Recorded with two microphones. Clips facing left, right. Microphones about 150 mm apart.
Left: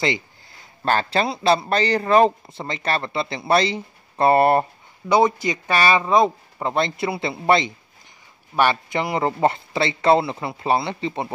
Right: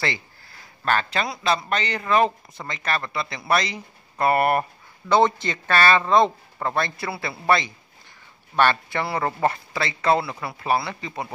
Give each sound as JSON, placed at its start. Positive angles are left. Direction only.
{"t": 0.0, "sound": "a sound", "side_deg": 20}
{"t": 0.8, "sound": "speech", "side_deg": 30}
{"t": 5.0, "sound": "speech", "side_deg": 10}